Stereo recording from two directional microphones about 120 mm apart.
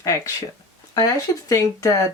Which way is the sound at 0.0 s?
25° left (ahead or behind).